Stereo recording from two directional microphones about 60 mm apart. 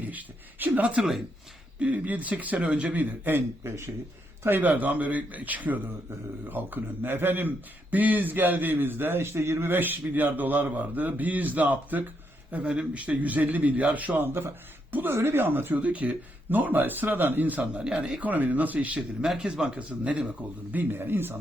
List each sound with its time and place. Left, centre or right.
0.0 s a man's voice: right
3.6 s speech: right
4.4 s a man's voice: right
15.1 s speech: right
15.8 s speech: right
17.7 s speech: centre
18.2 s a man's voice: right
19.2 s speech: centre
20.7 s speech: right